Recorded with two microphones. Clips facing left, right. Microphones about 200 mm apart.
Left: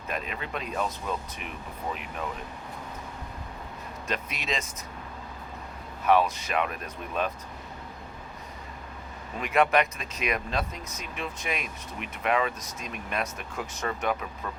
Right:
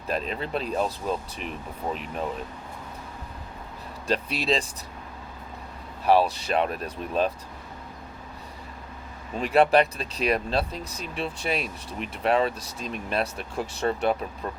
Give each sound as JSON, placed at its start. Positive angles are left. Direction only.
{"t": 0.1, "sound": "speech", "side_deg": -35}
{"t": 4.0, "sound": "speech", "side_deg": -30}
{"t": 6.1, "sound": "speech", "side_deg": -35}
{"t": 9.4, "sound": "speech", "side_deg": -30}